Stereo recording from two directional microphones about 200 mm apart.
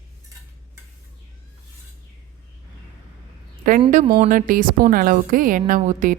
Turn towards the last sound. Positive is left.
turn(degrees=-40)  # may be behind; listen again after turning